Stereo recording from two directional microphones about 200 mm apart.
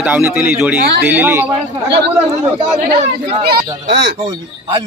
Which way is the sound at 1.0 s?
10° right (ahead or behind).